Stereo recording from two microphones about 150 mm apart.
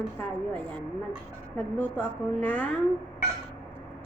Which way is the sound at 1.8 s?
10° left (ahead or behind).